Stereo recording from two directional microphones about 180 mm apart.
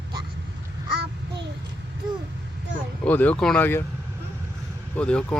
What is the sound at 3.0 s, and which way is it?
Speech, 10° left (ahead or behind).